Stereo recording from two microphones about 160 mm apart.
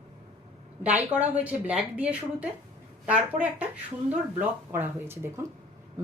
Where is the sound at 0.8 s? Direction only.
10° right (ahead or behind).